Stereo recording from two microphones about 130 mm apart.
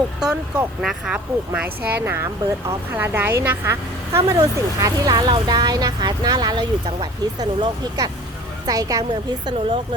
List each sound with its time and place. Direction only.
0.2 s speech: 5° right (ahead or behind)
4.4 s a woman's voice: 30° right (ahead or behind)